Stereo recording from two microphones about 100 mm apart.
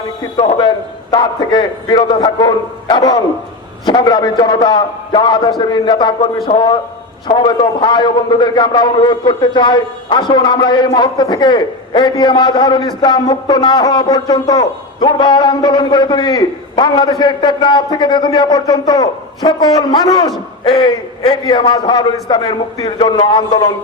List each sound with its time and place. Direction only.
1.1 s a man's voice: 50° left (ahead or behind)
20.7 s a man's voice: 60° left (ahead or behind)